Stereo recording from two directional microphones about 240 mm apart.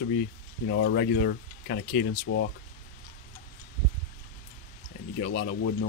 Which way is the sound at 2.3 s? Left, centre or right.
Left.